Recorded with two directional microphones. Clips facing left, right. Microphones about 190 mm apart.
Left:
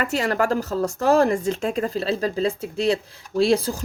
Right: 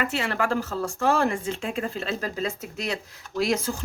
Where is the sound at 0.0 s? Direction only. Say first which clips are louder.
Left 4 dB; 40° left (ahead or behind).